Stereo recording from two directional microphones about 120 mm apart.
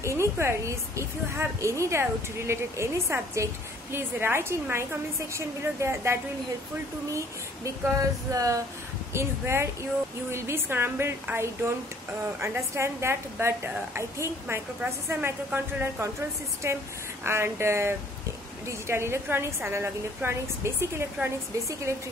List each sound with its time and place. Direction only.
0.0 s a woman's voice: 25° right (ahead or behind)